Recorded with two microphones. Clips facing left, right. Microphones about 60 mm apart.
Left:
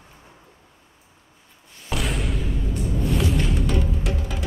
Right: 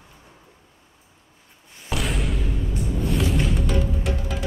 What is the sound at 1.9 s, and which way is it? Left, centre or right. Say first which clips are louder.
Music: even; centre.